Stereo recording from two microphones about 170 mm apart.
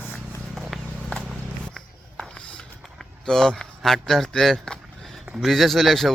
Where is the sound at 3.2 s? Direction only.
5° left (ahead or behind).